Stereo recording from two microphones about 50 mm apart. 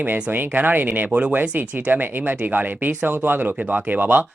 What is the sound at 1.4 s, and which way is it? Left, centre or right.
Speech, right.